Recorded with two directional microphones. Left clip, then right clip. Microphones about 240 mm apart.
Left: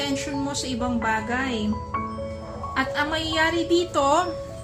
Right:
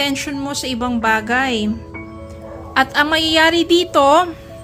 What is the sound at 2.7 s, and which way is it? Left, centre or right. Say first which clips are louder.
A woman's voice: right 10 dB; right.